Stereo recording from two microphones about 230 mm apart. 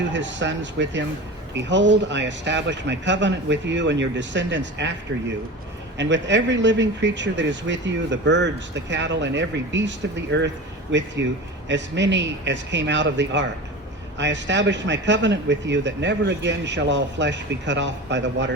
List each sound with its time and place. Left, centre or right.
0.1 s speech: right
6.0 s speech: right